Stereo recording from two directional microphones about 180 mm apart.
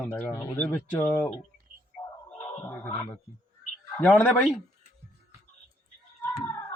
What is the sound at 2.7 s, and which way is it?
Speech, 10° left (ahead or behind).